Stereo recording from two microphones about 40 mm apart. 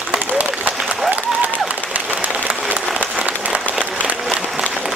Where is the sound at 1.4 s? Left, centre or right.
Right.